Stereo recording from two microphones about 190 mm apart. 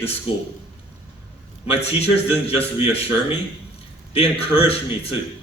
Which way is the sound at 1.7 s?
30° left (ahead or behind).